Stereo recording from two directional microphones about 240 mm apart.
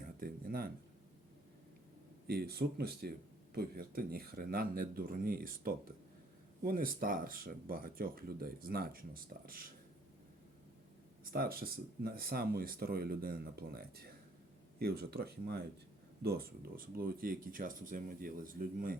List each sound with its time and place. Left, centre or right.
0.0 s a sound: right
2.2 s speech: right
11.3 s speech: right